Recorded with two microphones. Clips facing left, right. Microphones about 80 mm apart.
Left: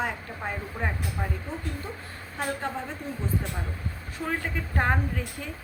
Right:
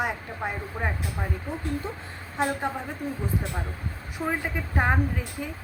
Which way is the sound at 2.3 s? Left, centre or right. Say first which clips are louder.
Right 4 dB; centre.